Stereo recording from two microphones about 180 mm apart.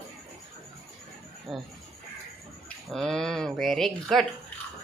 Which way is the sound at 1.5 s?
Centre (ahead or behind).